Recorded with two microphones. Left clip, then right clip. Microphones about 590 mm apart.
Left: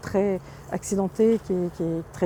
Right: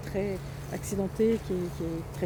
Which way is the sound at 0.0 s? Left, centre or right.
Left.